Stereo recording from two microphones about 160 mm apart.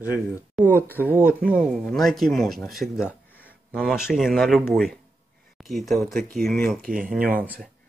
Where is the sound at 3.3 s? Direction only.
10° left (ahead or behind).